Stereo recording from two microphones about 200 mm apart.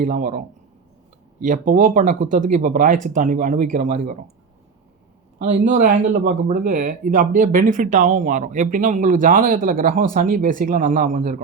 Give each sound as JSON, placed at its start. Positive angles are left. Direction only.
{"t": 0.0, "sound": "speech", "side_deg": -40}
{"t": 5.4, "sound": "speech", "side_deg": -35}